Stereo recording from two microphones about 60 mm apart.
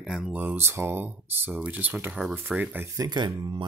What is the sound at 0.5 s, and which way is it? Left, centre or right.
Speech, right.